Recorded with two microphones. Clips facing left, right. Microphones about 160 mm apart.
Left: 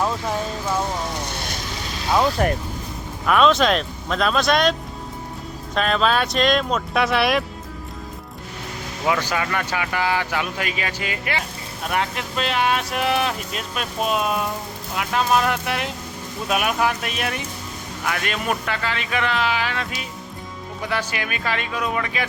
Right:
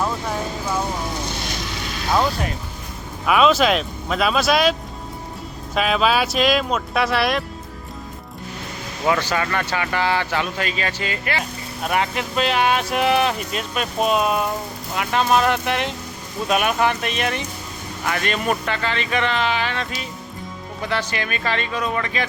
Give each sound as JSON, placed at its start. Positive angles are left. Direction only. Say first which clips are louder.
{"t": 2.4, "sound": "speech", "louder": "left 7 dB", "side_deg": 50}
{"t": 3.2, "sound": "speech", "louder": "right 1 dB", "side_deg": -5}
{"t": 9.0, "sound": "speech", "louder": "right 2 dB", "side_deg": 10}
{"t": 11.9, "sound": "speech", "louder": "right 2 dB", "side_deg": 0}